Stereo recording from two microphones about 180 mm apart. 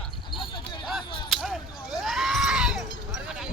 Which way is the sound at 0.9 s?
Centre (ahead or behind).